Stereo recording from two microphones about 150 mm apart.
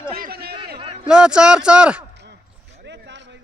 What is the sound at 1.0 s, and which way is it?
A man's voice, 5° right (ahead or behind).